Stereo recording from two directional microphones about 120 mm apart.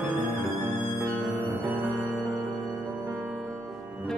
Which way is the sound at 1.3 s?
15° right (ahead or behind).